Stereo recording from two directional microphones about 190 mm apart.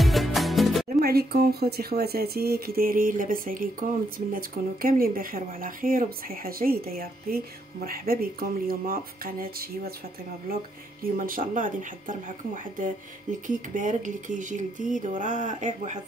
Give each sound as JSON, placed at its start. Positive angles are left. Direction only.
{"t": 0.0, "sound": "music", "side_deg": 0}
{"t": 1.0, "sound": "speech", "side_deg": -55}